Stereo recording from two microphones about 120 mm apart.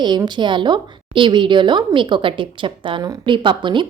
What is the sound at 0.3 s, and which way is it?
A woman's voice, 40° right (ahead or behind).